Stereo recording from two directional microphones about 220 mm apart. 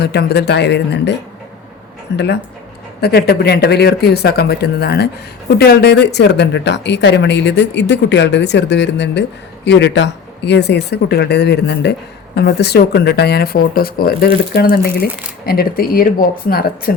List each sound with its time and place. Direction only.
0.0 s speech: 50° left (ahead or behind)
2.1 s speech: 50° left (ahead or behind)